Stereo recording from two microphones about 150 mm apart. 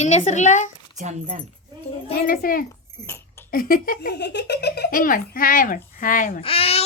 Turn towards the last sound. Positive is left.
turn(degrees=40)  # may be behind; listen again after turning